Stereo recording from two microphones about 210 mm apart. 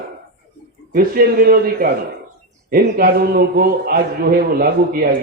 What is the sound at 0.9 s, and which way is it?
A man's voice, 45° right (ahead or behind).